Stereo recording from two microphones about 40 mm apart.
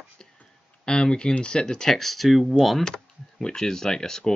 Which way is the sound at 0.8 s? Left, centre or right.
Centre.